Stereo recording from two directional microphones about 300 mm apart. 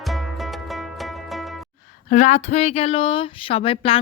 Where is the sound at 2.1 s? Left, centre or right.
Left.